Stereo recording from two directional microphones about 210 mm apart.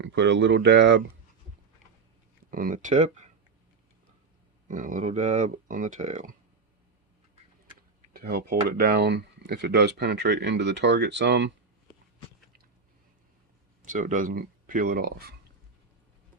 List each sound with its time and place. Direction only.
0.0 s speech: 55° right (ahead or behind)
2.5 s speech: 40° right (ahead or behind)
4.7 s speech: 40° right (ahead or behind)
8.1 s speech: 50° right (ahead or behind)
13.8 s speech: 35° right (ahead or behind)